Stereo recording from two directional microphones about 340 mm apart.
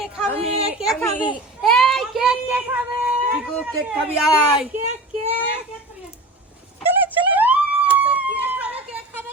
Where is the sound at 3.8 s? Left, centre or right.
Centre.